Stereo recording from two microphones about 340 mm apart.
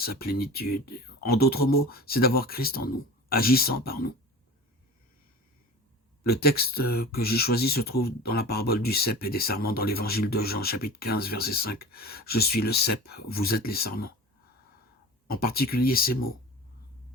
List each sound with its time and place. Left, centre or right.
0.0 s speech: left
6.2 s speech: left
15.3 s speech: left